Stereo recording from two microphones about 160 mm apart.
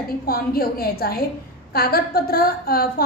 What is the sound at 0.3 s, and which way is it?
A woman's voice, 70° left (ahead or behind).